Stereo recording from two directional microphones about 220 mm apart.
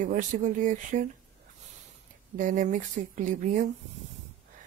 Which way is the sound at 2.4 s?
35° right (ahead or behind).